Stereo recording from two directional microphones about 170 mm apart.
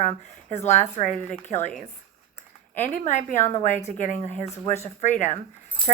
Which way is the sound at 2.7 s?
45° left (ahead or behind).